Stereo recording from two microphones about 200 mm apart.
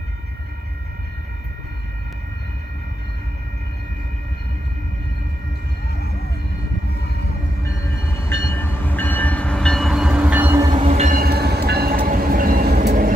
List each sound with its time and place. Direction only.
8.1 s train: 10° left (ahead or behind); by 13.1 s 40° right (ahead or behind)